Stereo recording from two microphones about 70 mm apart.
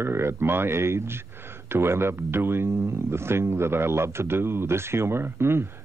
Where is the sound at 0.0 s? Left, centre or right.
Right.